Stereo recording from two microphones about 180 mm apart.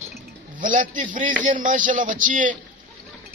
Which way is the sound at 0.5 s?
50° right (ahead or behind).